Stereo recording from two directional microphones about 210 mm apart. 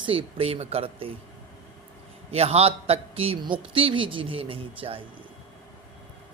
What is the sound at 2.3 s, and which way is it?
A woman's voice, 30° right (ahead or behind).